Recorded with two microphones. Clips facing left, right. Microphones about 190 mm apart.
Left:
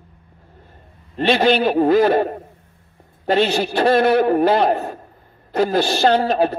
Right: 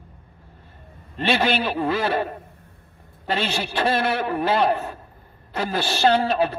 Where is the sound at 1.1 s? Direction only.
40° left (ahead or behind).